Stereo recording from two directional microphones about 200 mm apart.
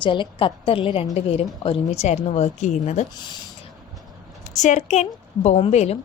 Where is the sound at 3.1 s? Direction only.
20° left (ahead or behind).